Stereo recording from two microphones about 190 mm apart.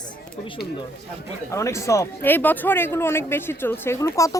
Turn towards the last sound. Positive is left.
turn(degrees=15)  # may be behind; listen again after turning